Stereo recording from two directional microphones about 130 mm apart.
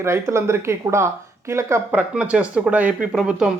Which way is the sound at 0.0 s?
20° right (ahead or behind).